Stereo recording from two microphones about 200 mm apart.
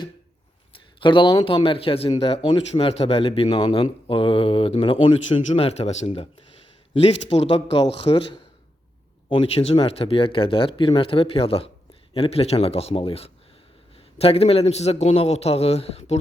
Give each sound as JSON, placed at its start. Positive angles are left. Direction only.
{"t": 0.7, "sound": "a man's voice", "side_deg": 25}